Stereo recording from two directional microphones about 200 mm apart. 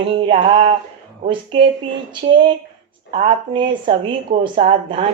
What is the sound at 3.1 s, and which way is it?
Speech, 30° right (ahead or behind).